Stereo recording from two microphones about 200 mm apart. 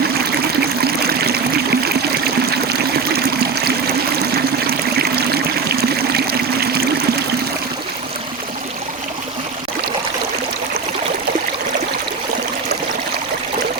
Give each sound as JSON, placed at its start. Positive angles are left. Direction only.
{"t": 0.9, "sound": "trickle", "side_deg": -50}
{"t": 6.1, "sound": "stream", "side_deg": -50}